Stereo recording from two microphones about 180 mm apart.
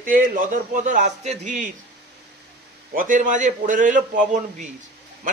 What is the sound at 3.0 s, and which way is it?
A man's voice, 45° right (ahead or behind).